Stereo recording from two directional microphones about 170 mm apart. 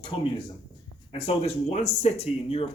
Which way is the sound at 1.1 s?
35° left (ahead or behind).